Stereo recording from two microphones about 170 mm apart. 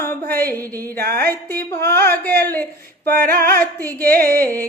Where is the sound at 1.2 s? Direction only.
10° left (ahead or behind).